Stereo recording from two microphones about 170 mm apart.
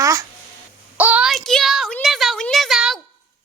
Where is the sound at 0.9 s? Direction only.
10° right (ahead or behind).